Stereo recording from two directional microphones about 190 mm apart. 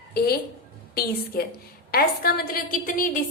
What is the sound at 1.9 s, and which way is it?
A woman's voice, 50° left (ahead or behind).